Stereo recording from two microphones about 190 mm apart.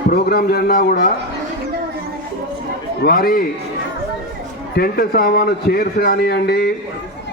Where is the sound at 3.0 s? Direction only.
50° left (ahead or behind).